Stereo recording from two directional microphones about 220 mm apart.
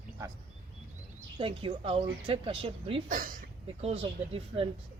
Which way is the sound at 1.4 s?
25° right (ahead or behind).